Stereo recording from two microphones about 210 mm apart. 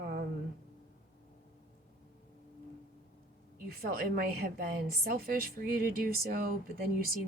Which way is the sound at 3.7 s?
45° right (ahead or behind).